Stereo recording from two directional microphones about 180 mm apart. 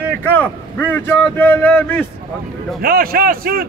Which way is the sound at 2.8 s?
55° right (ahead or behind).